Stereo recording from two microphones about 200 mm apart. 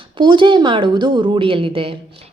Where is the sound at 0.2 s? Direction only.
25° right (ahead or behind).